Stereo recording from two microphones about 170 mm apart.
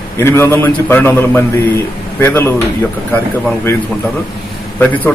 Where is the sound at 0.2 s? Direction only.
15° left (ahead or behind).